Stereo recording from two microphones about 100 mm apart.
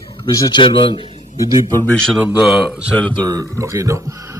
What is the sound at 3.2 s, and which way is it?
Speech, 35° right (ahead or behind).